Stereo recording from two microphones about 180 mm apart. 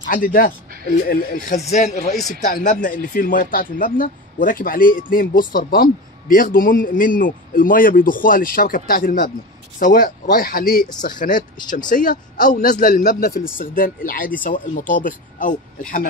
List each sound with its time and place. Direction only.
0.1 s speech: 50° left (ahead or behind)